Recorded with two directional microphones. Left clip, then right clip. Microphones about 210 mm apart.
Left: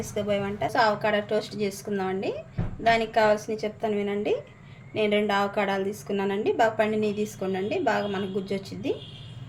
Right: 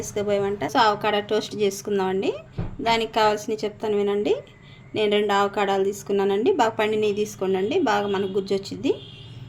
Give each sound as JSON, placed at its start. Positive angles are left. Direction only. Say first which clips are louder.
{"t": 0.1, "sound": "a woman's voice", "louder": "right 5 dB", "side_deg": -45}